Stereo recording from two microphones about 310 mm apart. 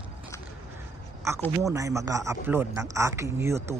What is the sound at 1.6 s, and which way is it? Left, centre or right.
A man's voice, centre.